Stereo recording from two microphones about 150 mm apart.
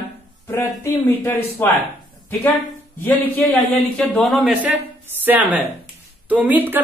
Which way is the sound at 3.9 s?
5° left (ahead or behind).